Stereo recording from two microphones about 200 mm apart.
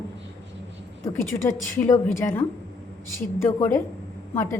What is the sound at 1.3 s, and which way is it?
A woman's voice, 15° left (ahead or behind).